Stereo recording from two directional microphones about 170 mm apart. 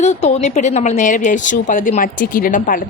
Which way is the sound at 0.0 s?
40° left (ahead or behind).